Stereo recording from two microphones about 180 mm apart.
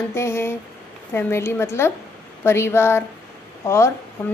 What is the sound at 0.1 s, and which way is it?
A woman's voice, 15° left (ahead or behind).